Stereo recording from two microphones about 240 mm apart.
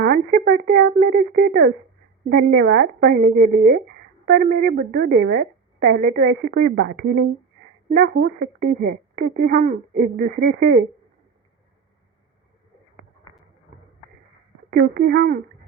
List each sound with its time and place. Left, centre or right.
0.0 s a woman's voice: right
14.9 s a woman's voice: right